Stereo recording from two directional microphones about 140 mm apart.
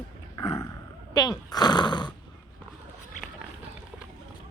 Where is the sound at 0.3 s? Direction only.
35° left (ahead or behind).